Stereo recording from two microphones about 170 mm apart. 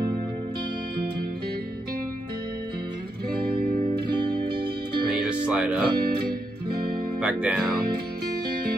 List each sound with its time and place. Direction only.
3.4 s music: 60° right (ahead or behind)
4.2 s music: 30° right (ahead or behind)
5.0 s music: 5° right (ahead or behind)
7.2 s speech: 10° right (ahead or behind)